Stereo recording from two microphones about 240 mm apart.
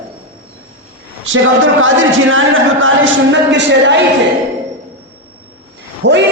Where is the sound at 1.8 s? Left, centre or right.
Right.